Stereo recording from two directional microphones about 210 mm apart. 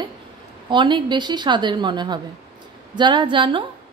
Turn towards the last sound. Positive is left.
turn(degrees=-25)  # may be behind; listen again after turning